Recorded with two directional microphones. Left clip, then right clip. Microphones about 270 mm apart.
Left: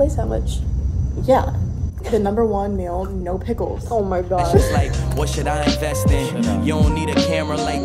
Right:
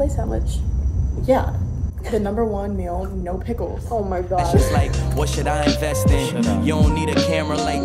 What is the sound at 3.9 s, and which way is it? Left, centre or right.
Speech, left.